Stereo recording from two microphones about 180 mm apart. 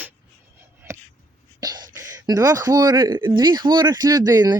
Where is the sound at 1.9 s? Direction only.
20° right (ahead or behind).